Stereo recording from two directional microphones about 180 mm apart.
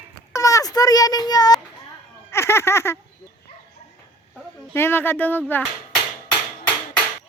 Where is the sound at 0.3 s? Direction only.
20° left (ahead or behind).